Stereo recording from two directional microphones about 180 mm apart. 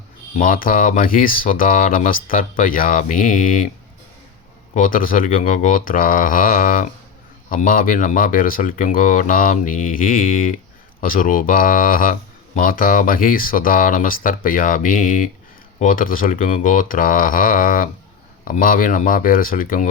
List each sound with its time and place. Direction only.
0.3 s speech: 50° left (ahead or behind)
4.7 s speech: 50° left (ahead or behind)